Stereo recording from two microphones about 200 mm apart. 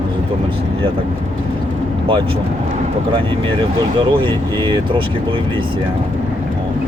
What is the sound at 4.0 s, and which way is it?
Speech, 25° right (ahead or behind).